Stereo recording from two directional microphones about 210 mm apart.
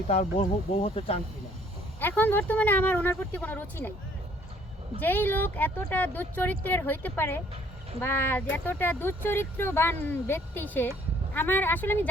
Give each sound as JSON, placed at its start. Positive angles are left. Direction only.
{"t": 0.1, "sound": "speech", "side_deg": 30}
{"t": 2.0, "sound": "speech", "side_deg": 10}
{"t": 4.9, "sound": "speech", "side_deg": 10}